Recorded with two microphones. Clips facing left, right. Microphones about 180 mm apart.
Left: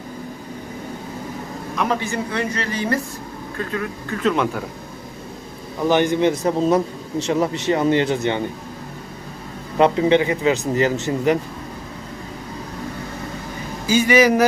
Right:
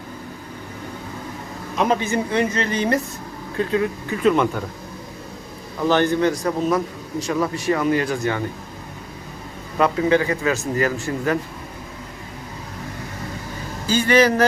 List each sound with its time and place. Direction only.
1.7 s a woman's voice: 20° right (ahead or behind)
4.2 s speech: 5° right (ahead or behind)
5.9 s a man's voice: 15° left (ahead or behind)
9.7 s a man's voice: 25° left (ahead or behind)
13.8 s speech: 10° left (ahead or behind)